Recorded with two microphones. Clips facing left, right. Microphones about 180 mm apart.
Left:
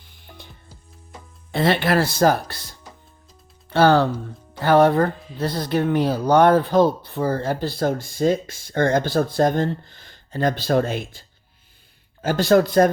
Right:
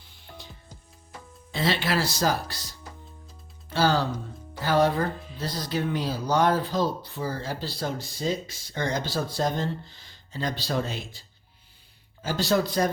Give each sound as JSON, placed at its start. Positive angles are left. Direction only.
{"t": 0.1, "sound": "music", "side_deg": 55}
{"t": 1.5, "sound": "speech", "side_deg": 55}